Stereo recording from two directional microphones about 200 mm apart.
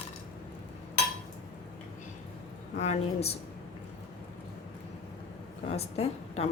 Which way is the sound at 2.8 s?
30° left (ahead or behind).